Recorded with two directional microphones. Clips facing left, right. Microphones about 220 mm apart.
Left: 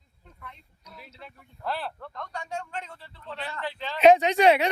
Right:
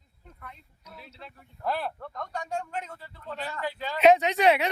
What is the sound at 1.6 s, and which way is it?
A man's voice, 15° right (ahead or behind).